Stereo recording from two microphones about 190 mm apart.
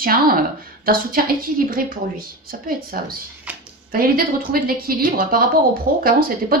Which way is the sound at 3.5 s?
10° right (ahead or behind).